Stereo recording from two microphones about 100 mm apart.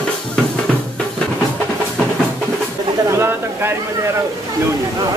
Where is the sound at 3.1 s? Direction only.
25° right (ahead or behind).